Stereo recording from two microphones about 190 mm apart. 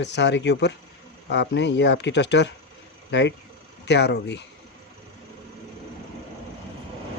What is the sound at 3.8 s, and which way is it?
Speech, 65° left (ahead or behind).